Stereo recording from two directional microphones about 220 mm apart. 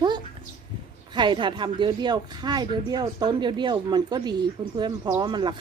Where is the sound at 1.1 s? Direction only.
20° right (ahead or behind).